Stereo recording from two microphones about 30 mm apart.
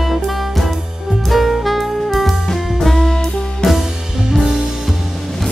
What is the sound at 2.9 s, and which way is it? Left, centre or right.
Music, centre.